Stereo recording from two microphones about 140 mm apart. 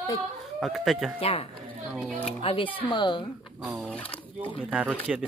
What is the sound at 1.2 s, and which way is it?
Speech, 45° left (ahead or behind).